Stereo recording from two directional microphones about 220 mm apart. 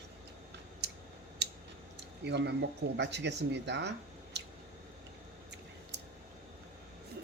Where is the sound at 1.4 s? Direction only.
50° right (ahead or behind).